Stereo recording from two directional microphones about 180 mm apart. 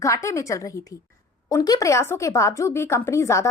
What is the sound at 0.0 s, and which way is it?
A woman's voice, 15° left (ahead or behind).